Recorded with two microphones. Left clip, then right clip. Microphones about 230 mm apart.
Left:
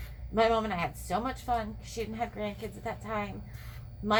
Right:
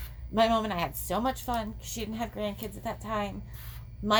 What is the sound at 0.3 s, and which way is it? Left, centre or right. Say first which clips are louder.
Speech: right 1 dB; right.